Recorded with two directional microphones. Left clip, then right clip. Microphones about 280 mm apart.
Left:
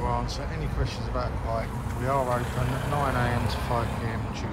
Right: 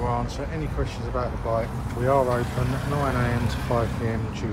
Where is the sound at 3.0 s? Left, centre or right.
Centre.